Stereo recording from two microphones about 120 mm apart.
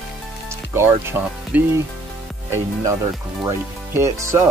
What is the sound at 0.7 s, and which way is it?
Speech, 20° right (ahead or behind).